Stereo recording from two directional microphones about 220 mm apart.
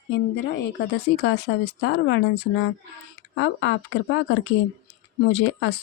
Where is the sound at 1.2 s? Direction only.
55° left (ahead or behind).